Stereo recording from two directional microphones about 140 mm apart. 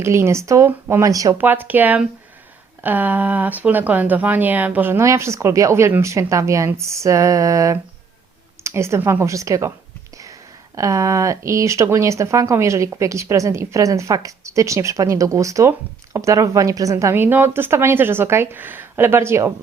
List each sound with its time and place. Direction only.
0.0 s speech: 20° right (ahead or behind)
1.4 s a woman's voice: 15° right (ahead or behind)
10.8 s a woman's voice: 20° right (ahead or behind)